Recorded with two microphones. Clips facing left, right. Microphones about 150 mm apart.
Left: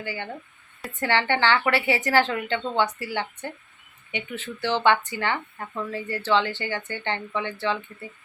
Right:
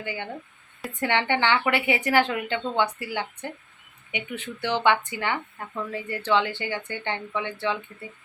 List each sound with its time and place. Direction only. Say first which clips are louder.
0.0 s a woman's voice: even; 20° right (ahead or behind)